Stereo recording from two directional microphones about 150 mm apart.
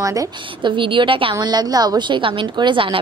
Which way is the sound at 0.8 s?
35° right (ahead or behind).